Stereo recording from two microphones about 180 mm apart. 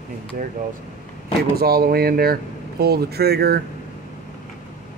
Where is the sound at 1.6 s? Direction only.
60° right (ahead or behind).